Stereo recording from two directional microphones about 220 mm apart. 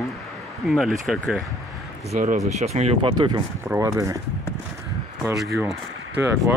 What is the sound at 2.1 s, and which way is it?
Speech, 35° right (ahead or behind).